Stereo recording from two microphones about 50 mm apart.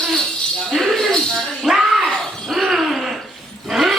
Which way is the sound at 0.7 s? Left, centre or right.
Centre.